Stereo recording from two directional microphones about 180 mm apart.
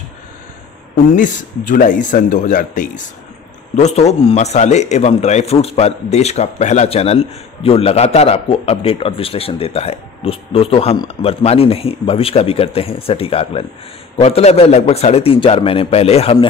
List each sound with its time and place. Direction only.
1.1 s a man's voice: 45° left (ahead or behind)